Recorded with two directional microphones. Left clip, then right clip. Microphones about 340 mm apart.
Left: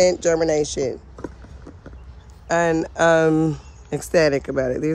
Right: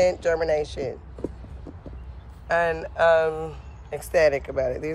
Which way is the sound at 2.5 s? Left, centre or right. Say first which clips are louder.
Left 4 dB; left.